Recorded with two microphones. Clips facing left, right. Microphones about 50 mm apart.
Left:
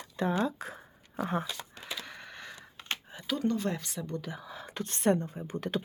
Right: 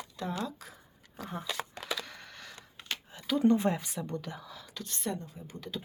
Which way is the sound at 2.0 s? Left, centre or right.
Centre.